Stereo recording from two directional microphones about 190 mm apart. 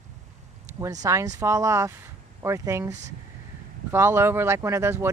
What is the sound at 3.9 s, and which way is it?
Speech, 15° right (ahead or behind).